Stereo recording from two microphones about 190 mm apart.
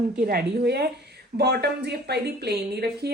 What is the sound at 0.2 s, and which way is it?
A woman's voice, 55° right (ahead or behind).